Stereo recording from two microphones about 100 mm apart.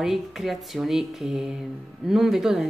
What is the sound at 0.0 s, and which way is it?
Speech, centre (ahead or behind).